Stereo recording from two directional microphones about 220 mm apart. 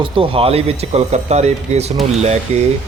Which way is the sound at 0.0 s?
25° right (ahead or behind).